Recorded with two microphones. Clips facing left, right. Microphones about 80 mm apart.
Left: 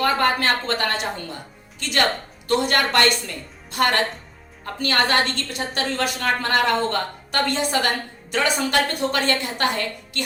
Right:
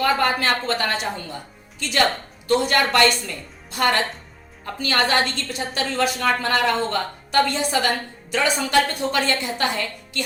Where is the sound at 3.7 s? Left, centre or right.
Left.